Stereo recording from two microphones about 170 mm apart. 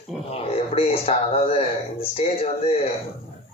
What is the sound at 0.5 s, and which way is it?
Speech, 35° left (ahead or behind).